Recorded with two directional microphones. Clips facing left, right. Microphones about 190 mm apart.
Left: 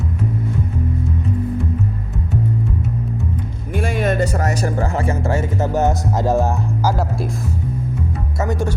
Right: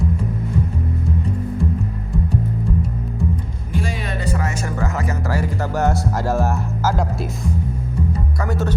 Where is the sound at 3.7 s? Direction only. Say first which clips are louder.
Left 6 dB; 55° left (ahead or behind); by 7.0 s 10° left (ahead or behind).